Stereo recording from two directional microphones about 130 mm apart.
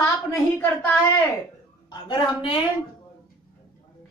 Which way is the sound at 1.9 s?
40° left (ahead or behind).